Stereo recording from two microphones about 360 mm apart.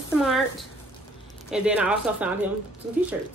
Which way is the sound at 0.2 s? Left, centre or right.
Centre.